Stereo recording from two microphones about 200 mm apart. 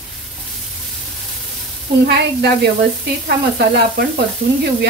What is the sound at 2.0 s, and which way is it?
Speech, 55° right (ahead or behind).